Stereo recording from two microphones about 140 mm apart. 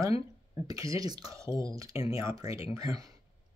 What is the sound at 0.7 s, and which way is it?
Speech, 25° right (ahead or behind).